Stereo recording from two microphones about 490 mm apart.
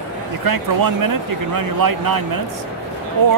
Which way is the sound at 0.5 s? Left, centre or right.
Right.